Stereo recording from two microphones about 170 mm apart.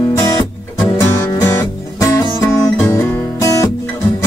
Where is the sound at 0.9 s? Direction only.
15° left (ahead or behind).